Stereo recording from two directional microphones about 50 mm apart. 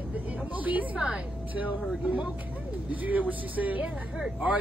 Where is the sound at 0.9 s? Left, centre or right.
Centre.